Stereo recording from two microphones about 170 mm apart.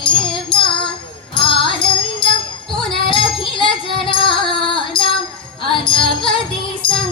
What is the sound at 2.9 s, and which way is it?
Music, 30° left (ahead or behind).